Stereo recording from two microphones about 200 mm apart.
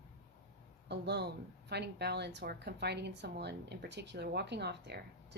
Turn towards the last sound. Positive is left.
turn(degrees=-55)  # may be behind; listen again after turning